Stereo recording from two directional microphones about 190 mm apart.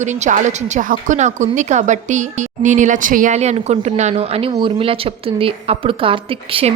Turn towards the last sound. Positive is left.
turn(degrees=-30)  # may be behind; listen again after turning